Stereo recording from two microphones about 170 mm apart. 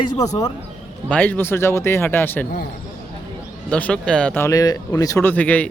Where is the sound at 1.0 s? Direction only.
10° left (ahead or behind).